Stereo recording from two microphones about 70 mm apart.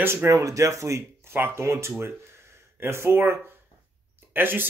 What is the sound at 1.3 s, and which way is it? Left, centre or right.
Speech, right.